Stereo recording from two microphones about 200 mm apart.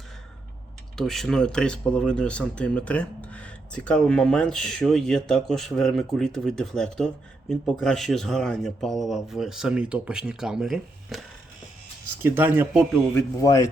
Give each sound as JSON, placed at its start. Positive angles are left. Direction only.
{"t": 0.9, "sound": "speech", "side_deg": 0}
{"t": 12.2, "sound": "speech", "side_deg": -10}
{"t": 13.1, "sound": "speech", "side_deg": 15}